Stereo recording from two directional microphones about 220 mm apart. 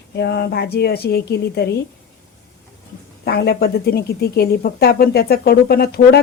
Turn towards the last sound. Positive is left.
turn(degrees=45)  # may be behind; listen again after turning